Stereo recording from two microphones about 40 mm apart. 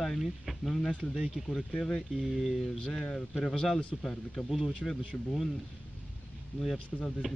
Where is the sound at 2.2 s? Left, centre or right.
Centre.